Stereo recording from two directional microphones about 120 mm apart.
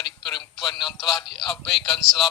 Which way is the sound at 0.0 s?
40° left (ahead or behind).